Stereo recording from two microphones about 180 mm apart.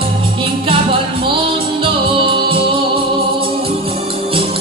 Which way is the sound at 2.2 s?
30° right (ahead or behind).